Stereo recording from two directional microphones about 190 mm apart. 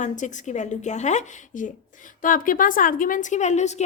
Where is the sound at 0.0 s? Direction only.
40° left (ahead or behind).